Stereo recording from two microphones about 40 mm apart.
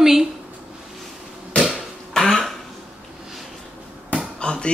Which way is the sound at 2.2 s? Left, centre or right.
Centre.